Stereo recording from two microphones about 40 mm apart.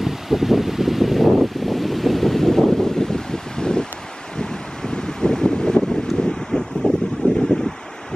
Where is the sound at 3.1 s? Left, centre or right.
Centre.